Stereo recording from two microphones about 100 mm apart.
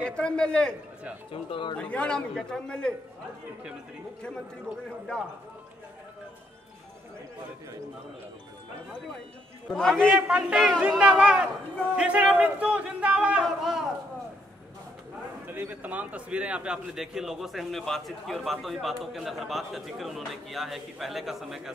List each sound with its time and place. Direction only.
0.0 s speech: 10° left (ahead or behind)
1.3 s speech: 60° left (ahead or behind)
1.8 s speech: 10° left (ahead or behind)
9.7 s a man's voice: 5° left (ahead or behind)
10.1 s a man's voice: 10° right (ahead or behind)
15.4 s a man's voice: 20° right (ahead or behind); by 21.7 s 5° right (ahead or behind)